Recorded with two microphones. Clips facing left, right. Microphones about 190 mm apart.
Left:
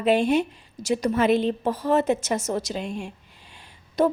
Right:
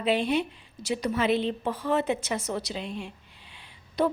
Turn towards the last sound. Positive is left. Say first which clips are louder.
# left 4 dB
turn(degrees=45)  # may be behind; listen again after turning